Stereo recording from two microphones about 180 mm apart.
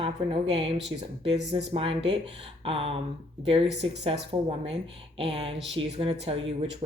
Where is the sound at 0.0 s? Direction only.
30° right (ahead or behind).